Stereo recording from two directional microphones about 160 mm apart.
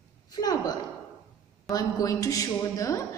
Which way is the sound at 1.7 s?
20° left (ahead or behind).